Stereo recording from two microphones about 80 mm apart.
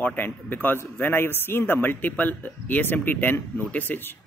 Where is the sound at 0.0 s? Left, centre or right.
Left.